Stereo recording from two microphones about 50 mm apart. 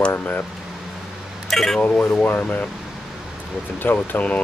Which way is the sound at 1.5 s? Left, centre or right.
Centre.